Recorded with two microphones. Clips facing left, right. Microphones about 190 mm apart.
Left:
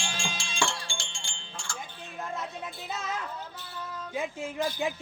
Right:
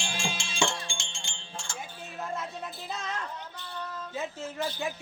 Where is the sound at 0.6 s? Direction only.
20° right (ahead or behind).